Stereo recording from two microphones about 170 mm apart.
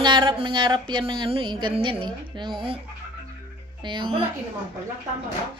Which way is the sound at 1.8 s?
30° right (ahead or behind).